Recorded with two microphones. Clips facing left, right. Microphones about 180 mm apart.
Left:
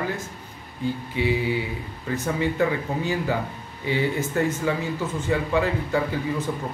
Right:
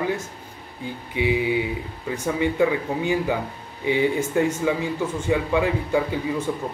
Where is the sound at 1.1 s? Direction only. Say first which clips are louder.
Right 4 dB; 15° right (ahead or behind).